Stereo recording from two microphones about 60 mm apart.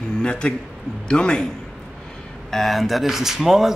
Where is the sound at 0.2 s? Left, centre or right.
Centre.